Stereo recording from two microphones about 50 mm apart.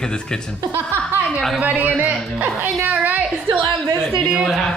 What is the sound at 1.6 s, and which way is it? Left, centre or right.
A man's voice, right.